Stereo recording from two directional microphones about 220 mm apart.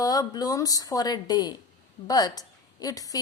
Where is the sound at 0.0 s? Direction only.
15° left (ahead or behind).